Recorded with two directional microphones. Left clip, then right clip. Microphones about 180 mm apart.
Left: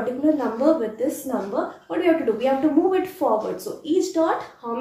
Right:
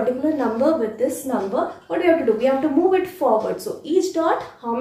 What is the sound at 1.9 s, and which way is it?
A woman's voice, 15° left (ahead or behind).